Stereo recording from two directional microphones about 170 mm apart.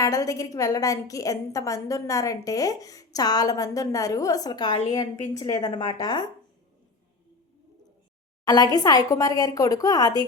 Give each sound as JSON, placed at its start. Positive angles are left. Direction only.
{"t": 0.0, "sound": "a woman's voice", "side_deg": 20}
{"t": 8.4, "sound": "a woman's voice", "side_deg": 20}